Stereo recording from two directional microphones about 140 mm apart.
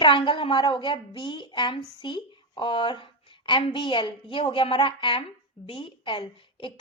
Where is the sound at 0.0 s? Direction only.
35° left (ahead or behind).